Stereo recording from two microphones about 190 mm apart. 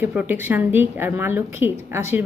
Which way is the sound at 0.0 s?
10° right (ahead or behind).